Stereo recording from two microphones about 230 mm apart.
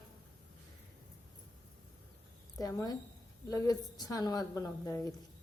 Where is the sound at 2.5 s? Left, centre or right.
Centre.